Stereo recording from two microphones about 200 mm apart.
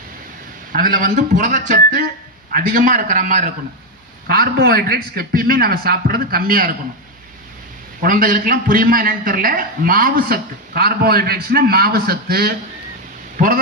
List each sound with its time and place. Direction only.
0.7 s speech: 45° right (ahead or behind)
8.0 s speech: 45° right (ahead or behind)